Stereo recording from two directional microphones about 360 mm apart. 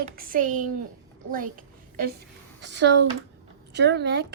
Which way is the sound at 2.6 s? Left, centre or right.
Right.